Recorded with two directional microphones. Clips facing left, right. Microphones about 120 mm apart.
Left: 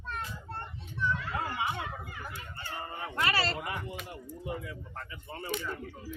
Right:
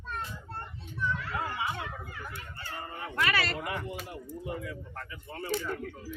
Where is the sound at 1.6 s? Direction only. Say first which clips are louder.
Left 1 dB; 25° left (ahead or behind).